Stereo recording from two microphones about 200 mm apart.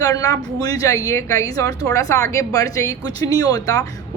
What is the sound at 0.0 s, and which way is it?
A woman's voice, 20° left (ahead or behind).